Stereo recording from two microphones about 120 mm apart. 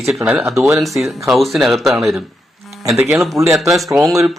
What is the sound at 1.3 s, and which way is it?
Speech, centre (ahead or behind).